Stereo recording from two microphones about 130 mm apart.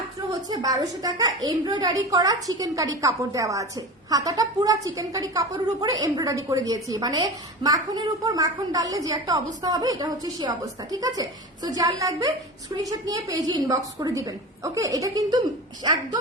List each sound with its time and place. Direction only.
0.4 s a woman's voice: 30° right (ahead or behind)